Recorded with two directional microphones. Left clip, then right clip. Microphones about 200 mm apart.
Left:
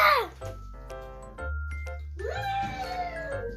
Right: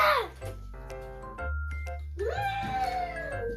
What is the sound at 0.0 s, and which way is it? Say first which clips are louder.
Music: left 3 dB; 30° left (ahead or behind).